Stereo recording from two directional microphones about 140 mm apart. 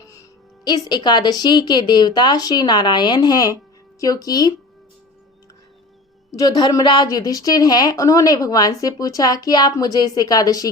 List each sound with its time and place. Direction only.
0.0 s music: 25° left (ahead or behind)
0.9 s a woman's voice: 30° left (ahead or behind)
6.3 s a woman's voice: 25° left (ahead or behind)